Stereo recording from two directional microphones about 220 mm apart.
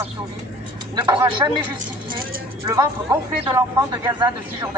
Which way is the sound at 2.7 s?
15° right (ahead or behind).